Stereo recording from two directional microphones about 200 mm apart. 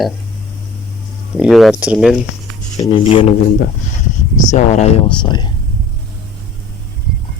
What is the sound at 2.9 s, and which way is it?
Speech, 25° left (ahead or behind).